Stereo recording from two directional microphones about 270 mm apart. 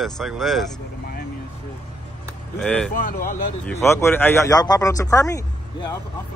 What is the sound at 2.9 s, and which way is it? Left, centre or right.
Speech, left.